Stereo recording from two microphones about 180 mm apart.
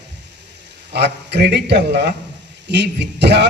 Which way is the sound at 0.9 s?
65° right (ahead or behind).